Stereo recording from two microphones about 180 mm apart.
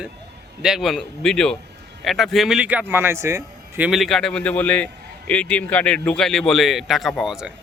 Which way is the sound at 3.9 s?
Centre (ahead or behind).